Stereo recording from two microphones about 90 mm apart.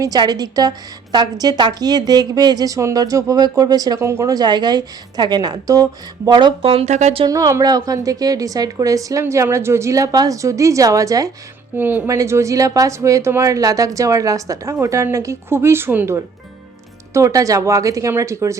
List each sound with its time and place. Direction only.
0.0 s a woman's voice: 45° right (ahead or behind)
4.0 s a woman's voice: 35° right (ahead or behind)
6.3 s speech: 75° right (ahead or behind)
7.3 s speech: 40° right (ahead or behind)
11.8 s speech: 20° right (ahead or behind)
12.0 s speech: 35° right (ahead or behind)
17.2 s speech: 35° right (ahead or behind)